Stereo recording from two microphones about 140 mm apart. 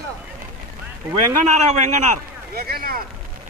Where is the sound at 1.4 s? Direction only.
55° right (ahead or behind); by 3.0 s 90° right.